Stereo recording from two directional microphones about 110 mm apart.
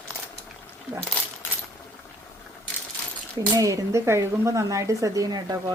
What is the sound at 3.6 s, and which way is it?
Speech, 30° right (ahead or behind).